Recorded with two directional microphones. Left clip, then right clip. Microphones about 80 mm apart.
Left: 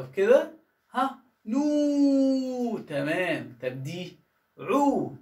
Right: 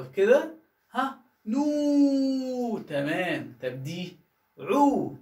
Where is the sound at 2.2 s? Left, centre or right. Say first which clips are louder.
Left 2 dB; left.